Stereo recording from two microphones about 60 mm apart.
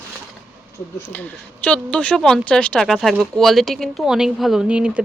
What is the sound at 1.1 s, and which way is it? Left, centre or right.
Speech, left.